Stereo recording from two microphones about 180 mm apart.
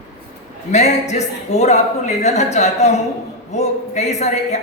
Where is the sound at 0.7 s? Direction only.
40° left (ahead or behind).